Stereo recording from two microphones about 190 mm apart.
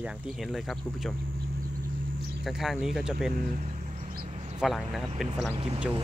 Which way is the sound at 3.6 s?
40° right (ahead or behind).